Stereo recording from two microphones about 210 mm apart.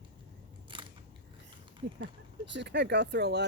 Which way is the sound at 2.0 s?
55° right (ahead or behind).